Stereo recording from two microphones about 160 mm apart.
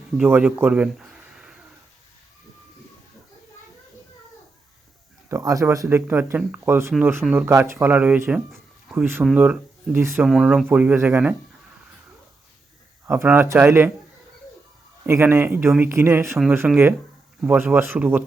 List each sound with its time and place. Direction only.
0.2 s speech: 10° right (ahead or behind)
5.3 s speech: 20° right (ahead or behind)
8.5 s a sound: 5° right (ahead or behind)
9.2 s speech: 5° right (ahead or behind)
10.2 s speech: centre (ahead or behind)
13.1 s speech: 10° right (ahead or behind)
15.0 s speech: 15° right (ahead or behind)